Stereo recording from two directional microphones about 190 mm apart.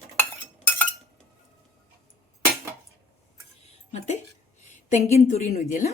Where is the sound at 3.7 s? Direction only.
35° left (ahead or behind).